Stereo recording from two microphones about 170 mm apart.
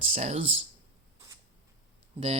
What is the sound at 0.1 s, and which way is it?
Speech, 40° right (ahead or behind).